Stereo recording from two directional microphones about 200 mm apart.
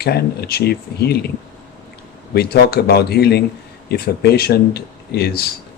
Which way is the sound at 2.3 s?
50° left (ahead or behind).